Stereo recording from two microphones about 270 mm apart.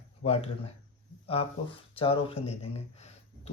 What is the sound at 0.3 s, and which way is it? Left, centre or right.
Speech, left.